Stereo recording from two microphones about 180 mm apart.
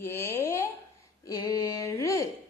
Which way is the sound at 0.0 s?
15° left (ahead or behind).